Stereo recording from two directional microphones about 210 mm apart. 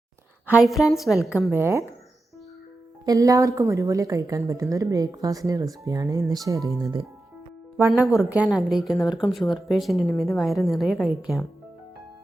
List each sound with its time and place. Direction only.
0.4 s a woman's voice: 5° right (ahead or behind)
1.5 s a woman's voice: 10° right (ahead or behind)
3.1 s a woman's voice: 15° right (ahead or behind)